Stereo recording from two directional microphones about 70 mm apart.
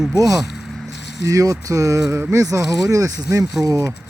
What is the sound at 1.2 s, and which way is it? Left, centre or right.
Speech, right.